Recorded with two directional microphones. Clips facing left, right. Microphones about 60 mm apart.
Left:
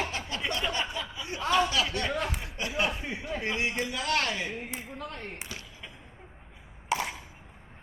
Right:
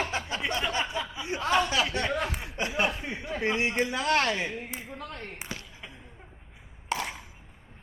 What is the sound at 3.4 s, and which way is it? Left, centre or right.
Speech, right.